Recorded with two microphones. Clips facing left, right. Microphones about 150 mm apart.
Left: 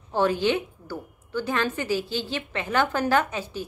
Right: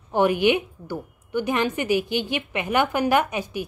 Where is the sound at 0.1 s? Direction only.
15° right (ahead or behind).